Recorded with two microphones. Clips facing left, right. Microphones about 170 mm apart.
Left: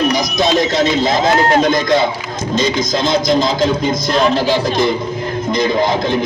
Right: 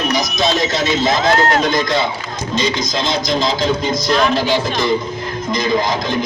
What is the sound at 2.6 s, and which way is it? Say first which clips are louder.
Speech: left 3 dB; 50° left (ahead or behind).